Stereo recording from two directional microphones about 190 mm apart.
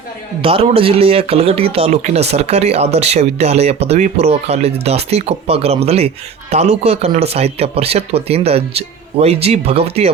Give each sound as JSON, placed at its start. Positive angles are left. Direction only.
{"t": 0.4, "sound": "speech", "side_deg": -30}